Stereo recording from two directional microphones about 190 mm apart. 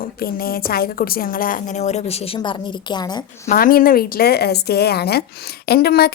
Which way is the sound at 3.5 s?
50° left (ahead or behind).